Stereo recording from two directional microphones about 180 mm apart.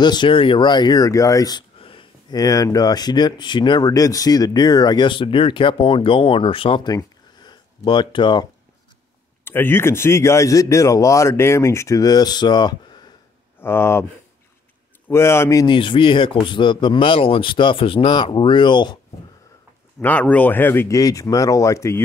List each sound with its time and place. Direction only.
0.0 s speech: 25° left (ahead or behind)
9.4 s a man's voice: 10° left (ahead or behind)
13.6 s a man's voice: 15° left (ahead or behind)
15.0 s a man's voice: 15° left (ahead or behind)
15.6 s speech: 25° left (ahead or behind)
20.0 s a man's voice: 10° left (ahead or behind)